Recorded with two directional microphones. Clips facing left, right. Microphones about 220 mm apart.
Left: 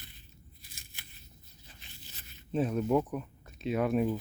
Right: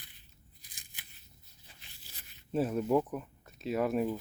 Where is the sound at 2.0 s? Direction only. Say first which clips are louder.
Left 4 dB; 10° right (ahead or behind).